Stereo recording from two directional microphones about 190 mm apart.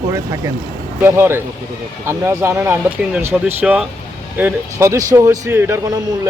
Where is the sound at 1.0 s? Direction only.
10° right (ahead or behind).